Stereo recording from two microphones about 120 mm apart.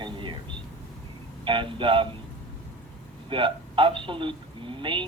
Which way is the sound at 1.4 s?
45° right (ahead or behind).